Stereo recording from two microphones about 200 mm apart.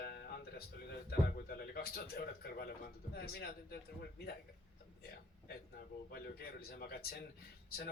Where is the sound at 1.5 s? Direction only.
50° left (ahead or behind).